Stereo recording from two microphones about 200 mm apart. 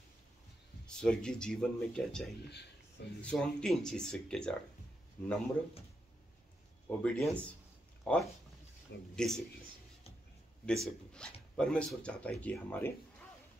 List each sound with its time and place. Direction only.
0.8 s speech: 5° left (ahead or behind)
2.5 s a sound: 55° left (ahead or behind)
3.2 s speech: 5° left (ahead or behind)
7.0 s speech: 5° left (ahead or behind)
10.6 s speech: 5° left (ahead or behind)